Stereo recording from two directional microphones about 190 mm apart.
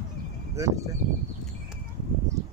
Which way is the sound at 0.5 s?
15° right (ahead or behind).